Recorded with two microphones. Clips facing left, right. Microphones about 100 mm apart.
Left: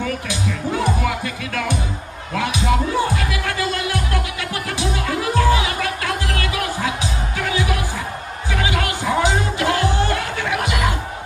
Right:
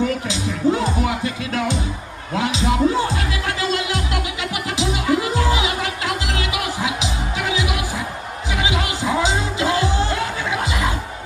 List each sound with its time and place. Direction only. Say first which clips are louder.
0.0 s music: right 2 dB; 25° right (ahead or behind)